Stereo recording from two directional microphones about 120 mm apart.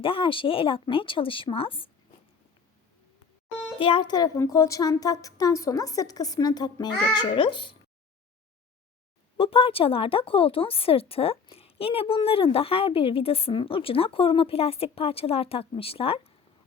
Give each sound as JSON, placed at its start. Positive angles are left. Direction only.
{"t": 0.0, "sound": "speech", "side_deg": 45}
{"t": 3.8, "sound": "a woman's voice", "side_deg": 45}
{"t": 9.4, "sound": "speech", "side_deg": 50}